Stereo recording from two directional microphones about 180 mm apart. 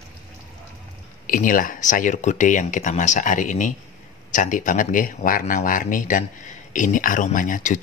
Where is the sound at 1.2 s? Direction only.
50° left (ahead or behind).